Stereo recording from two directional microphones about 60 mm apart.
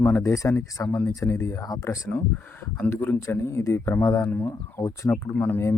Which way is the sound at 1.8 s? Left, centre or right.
Left.